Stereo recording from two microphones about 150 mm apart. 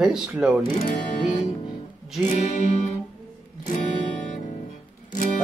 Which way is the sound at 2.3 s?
55° left (ahead or behind).